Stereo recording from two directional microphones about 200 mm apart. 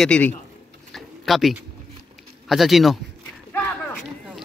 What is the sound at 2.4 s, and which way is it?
Speech, centre (ahead or behind).